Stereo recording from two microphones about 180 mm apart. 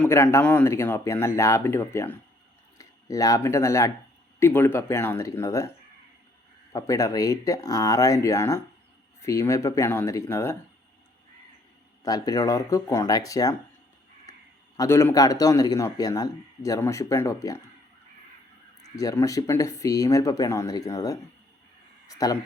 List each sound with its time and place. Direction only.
0.0 s speech: 15° left (ahead or behind)
6.7 s speech: 20° left (ahead or behind)
12.0 s a man's voice: 20° left (ahead or behind)
14.8 s a man's voice: 15° left (ahead or behind)
18.8 s a man's voice: 20° left (ahead or behind)